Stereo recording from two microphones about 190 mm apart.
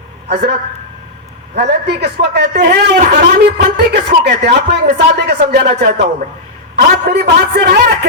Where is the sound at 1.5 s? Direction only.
60° right (ahead or behind).